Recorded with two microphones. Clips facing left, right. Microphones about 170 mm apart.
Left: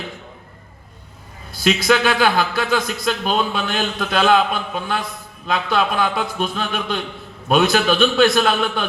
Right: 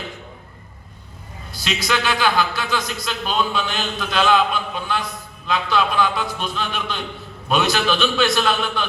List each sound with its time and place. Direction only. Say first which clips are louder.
1.5 s a man's voice: left 7 dB; 55° left (ahead or behind)